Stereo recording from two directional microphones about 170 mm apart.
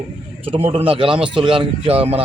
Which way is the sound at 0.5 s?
35° right (ahead or behind).